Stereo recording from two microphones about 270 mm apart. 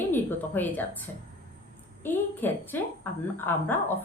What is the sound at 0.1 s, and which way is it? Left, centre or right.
Speech, centre.